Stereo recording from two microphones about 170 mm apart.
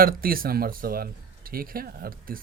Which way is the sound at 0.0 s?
60° right (ahead or behind).